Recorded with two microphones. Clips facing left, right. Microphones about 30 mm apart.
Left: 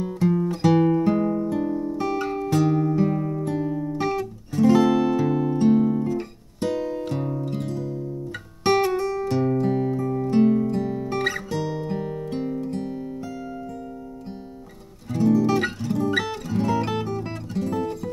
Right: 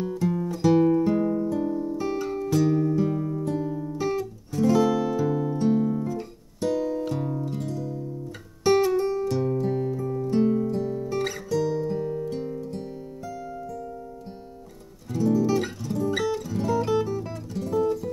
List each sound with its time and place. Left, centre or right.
0.0 s music: left
1.6 s music: centre
2.0 s music: left
3.9 s music: left
4.6 s music: left
8.6 s music: left
9.2 s music: left
13.2 s music: left
15.1 s music: left